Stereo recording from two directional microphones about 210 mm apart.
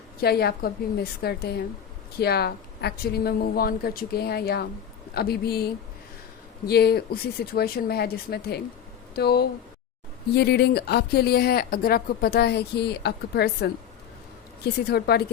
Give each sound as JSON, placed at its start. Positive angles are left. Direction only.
{"t": 0.2, "sound": "speech", "side_deg": 50}
{"t": 6.7, "sound": "speech", "side_deg": 50}